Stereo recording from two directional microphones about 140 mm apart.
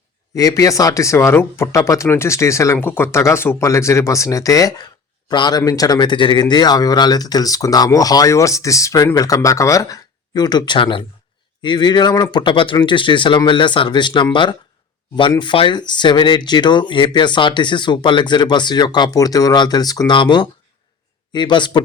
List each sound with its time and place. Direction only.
0.3 s a man's voice: 25° left (ahead or behind)